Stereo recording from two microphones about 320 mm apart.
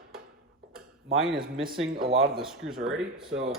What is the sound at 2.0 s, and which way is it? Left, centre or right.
Speech, centre.